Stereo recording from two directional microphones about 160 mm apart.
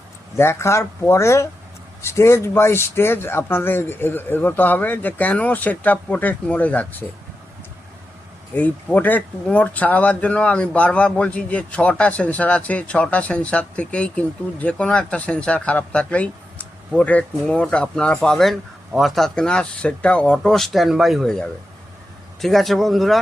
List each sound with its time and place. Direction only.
0.3 s speech: 15° left (ahead or behind)
8.5 s speech: 10° left (ahead or behind)